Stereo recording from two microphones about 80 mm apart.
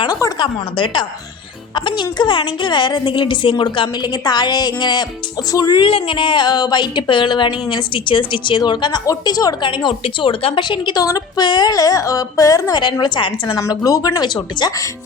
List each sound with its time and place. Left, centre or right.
0.1 s speech: left
0.3 s a woman's voice: left
3.6 s a woman's voice: left
5.5 s speech: left
5.8 s a woman's voice: left
9.0 s speech: left
9.6 s a woman's voice: left
11.0 s speech: left
12.8 s a woman's voice: left
13.6 s speech: left
14.6 s a woman's voice: left